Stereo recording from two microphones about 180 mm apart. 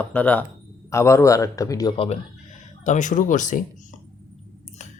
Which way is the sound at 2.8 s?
45° left (ahead or behind).